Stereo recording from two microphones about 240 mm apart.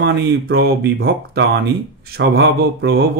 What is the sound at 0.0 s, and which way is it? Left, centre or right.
Speech, right.